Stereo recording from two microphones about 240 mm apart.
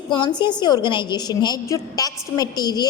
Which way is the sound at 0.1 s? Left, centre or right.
Centre.